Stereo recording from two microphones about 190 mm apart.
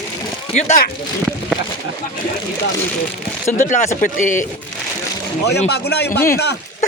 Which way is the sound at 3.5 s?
40° left (ahead or behind).